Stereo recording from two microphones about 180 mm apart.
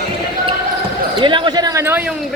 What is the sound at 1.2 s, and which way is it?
Basketball bounce, 25° right (ahead or behind).